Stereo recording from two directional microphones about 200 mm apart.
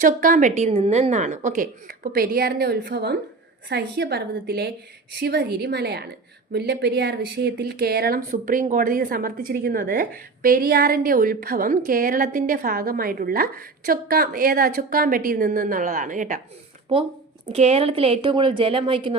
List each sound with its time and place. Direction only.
0.0 s a woman's voice: 40° right (ahead or behind)
17.5 s a woman's voice: 30° right (ahead or behind)